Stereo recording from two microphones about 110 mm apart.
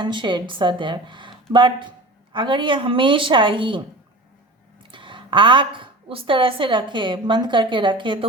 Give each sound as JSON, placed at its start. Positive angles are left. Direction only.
{"t": 0.0, "sound": "a woman's voice", "side_deg": -45}